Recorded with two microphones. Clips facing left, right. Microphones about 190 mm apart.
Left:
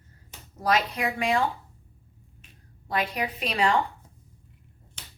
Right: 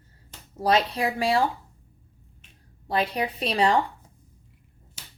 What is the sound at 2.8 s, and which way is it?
Speech, 30° right (ahead or behind).